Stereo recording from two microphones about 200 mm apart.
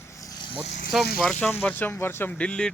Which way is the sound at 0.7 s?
40° left (ahead or behind).